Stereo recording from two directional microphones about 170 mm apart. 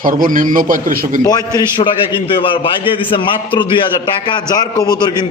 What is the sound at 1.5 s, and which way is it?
A man's voice, 30° left (ahead or behind).